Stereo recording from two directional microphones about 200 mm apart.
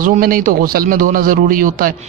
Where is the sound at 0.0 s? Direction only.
45° right (ahead or behind).